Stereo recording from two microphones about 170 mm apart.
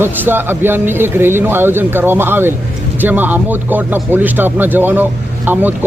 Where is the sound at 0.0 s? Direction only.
10° right (ahead or behind).